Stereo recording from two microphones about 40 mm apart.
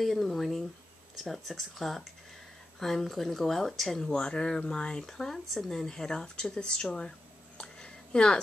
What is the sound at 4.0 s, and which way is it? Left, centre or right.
Speech, centre.